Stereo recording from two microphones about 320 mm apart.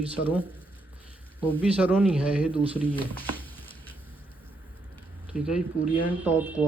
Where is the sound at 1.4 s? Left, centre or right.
Centre.